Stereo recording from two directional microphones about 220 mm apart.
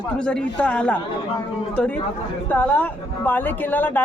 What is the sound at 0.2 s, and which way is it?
A woman's voice, 5° left (ahead or behind).